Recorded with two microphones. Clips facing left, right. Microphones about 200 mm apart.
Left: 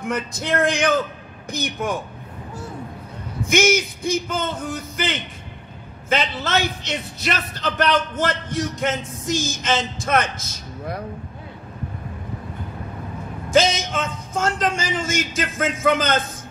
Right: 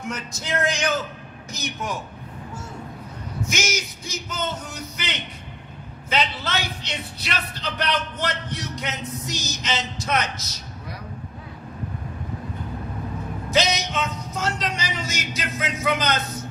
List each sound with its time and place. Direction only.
0.0 s a man's voice: 55° left (ahead or behind)
3.4 s a man's voice: 55° left (ahead or behind)
13.5 s a man's voice: 50° left (ahead or behind)